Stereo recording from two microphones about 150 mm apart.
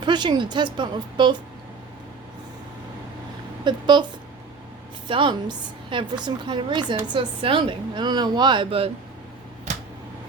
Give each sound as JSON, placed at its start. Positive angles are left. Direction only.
{"t": 0.0, "sound": "a woman's voice", "side_deg": -30}
{"t": 3.6, "sound": "a woman's voice", "side_deg": -30}
{"t": 5.0, "sound": "a woman's voice", "side_deg": -35}
{"t": 9.7, "sound": "a sound", "side_deg": -55}